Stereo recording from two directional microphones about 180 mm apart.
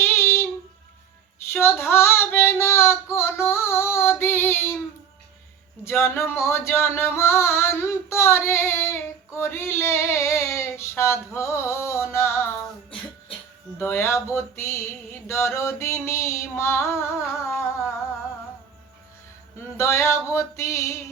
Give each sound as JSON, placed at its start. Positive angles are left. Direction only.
{"t": 0.0, "sound": "child singing", "side_deg": 15}
{"t": 1.5, "sound": "female singing", "side_deg": 15}
{"t": 5.8, "sound": "singing", "side_deg": 15}
{"t": 13.7, "sound": "a sound", "side_deg": 15}
{"t": 17.4, "sound": "singing", "side_deg": 15}
{"t": 19.7, "sound": "a sound", "side_deg": 15}